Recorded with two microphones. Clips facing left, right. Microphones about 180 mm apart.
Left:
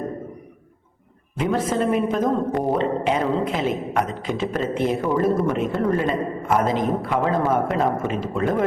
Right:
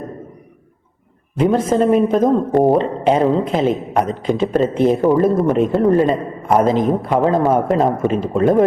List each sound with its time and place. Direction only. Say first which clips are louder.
1.4 s a man's voice: right 7 dB; 35° right (ahead or behind)